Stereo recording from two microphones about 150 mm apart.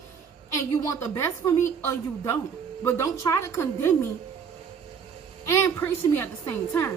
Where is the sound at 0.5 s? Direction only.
20° left (ahead or behind).